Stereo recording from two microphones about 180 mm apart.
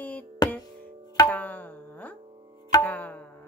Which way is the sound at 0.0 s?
10° left (ahead or behind).